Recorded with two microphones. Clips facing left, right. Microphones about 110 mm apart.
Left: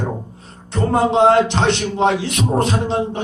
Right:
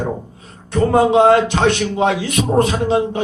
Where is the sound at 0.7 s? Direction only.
50° right (ahead or behind).